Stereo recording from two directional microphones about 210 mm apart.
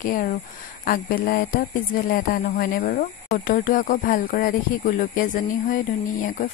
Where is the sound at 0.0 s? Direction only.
40° left (ahead or behind).